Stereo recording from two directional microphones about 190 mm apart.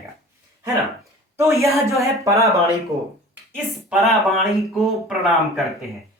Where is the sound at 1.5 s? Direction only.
15° right (ahead or behind).